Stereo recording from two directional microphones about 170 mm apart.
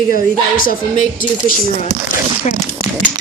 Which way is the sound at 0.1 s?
55° left (ahead or behind).